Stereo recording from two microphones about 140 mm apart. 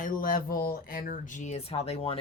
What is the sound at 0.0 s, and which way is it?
Speech, 80° left.